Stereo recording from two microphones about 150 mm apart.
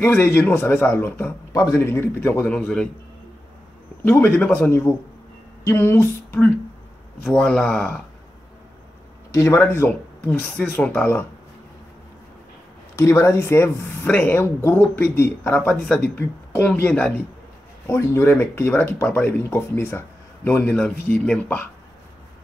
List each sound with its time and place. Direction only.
0.0 s speech: 10° left (ahead or behind)
4.0 s speech: 15° left (ahead or behind)
9.3 s speech: 20° left (ahead or behind)
12.9 s speech: 20° left (ahead or behind)